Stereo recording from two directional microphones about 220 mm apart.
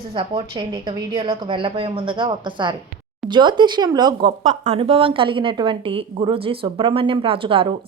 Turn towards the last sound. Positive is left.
turn(degrees=-25)  # may be behind; listen again after turning